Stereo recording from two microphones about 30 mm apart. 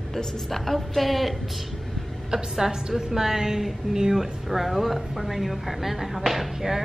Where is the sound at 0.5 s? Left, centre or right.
Centre.